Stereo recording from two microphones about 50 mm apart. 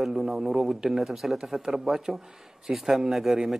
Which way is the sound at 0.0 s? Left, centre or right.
Centre.